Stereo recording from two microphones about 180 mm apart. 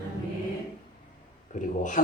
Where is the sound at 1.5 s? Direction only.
45° left (ahead or behind).